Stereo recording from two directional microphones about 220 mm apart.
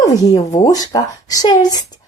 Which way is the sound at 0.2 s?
15° left (ahead or behind).